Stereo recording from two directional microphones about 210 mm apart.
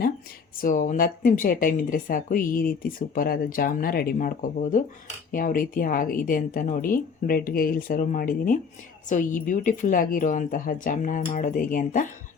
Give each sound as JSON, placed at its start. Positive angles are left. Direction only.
{"t": 0.6, "sound": "speech", "side_deg": 40}